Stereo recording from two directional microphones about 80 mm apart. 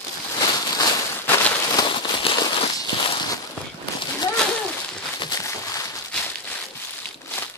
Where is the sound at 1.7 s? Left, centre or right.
Left.